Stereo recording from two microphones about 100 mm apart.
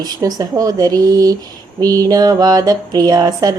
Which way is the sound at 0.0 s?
40° right (ahead or behind).